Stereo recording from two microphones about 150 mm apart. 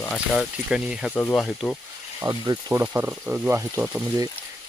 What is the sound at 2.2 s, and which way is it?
Speech, 25° right (ahead or behind).